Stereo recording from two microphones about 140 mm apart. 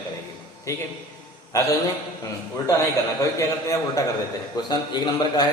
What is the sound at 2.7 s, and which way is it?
A man's voice, 20° left (ahead or behind).